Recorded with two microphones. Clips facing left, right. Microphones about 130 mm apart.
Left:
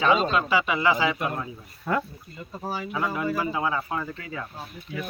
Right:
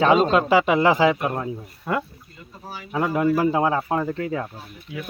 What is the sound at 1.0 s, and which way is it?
Speech, 40° right (ahead or behind).